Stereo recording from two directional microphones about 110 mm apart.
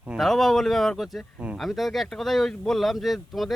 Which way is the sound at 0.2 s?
Centre (ahead or behind).